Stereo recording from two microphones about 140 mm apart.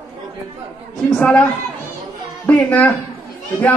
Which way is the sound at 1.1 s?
5° left (ahead or behind).